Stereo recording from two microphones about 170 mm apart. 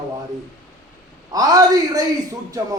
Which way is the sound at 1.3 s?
20° right (ahead or behind).